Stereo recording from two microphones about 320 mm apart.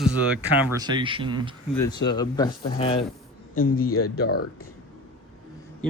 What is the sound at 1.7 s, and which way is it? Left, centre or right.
Speech, centre.